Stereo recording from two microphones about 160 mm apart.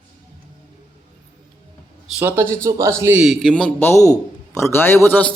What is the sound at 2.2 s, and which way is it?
Speech, 15° right (ahead or behind).